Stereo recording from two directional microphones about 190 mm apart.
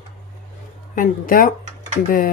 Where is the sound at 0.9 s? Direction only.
45° left (ahead or behind).